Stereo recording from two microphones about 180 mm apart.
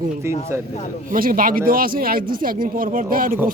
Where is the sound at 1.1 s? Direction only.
50° right (ahead or behind).